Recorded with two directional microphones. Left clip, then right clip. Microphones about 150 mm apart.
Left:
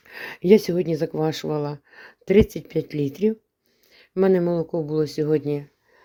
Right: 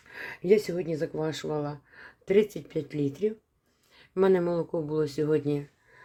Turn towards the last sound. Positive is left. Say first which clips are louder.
# left 4 dB
turn(degrees=40)  # may be behind; listen again after turning